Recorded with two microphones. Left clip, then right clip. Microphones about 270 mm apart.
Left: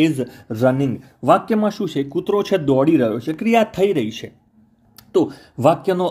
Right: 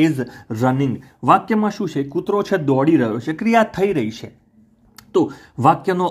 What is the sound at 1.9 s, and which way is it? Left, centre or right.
Speech, right.